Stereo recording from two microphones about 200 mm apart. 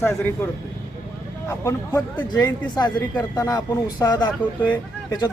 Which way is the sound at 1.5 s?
15° left (ahead or behind).